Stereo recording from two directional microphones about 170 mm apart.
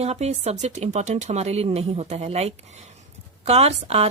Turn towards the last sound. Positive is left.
turn(degrees=-40)  # may be behind; listen again after turning